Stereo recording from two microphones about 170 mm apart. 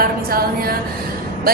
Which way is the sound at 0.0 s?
60° right (ahead or behind).